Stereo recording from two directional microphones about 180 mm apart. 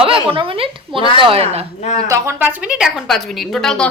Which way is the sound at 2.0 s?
15° right (ahead or behind).